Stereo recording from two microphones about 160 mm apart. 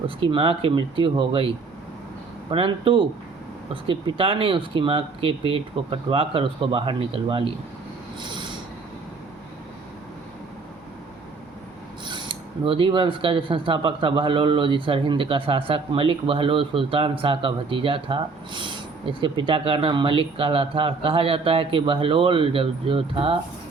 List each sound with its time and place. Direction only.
0.2 s speech: 35° right (ahead or behind)
8.2 s train wheels squealing: 30° right (ahead or behind)
12.0 s speech: 30° right (ahead or behind)